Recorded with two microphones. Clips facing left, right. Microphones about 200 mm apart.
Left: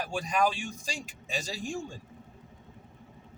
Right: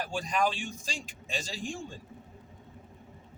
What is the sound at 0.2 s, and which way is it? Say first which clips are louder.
A man's voice: left 2 dB; 10° left (ahead or behind).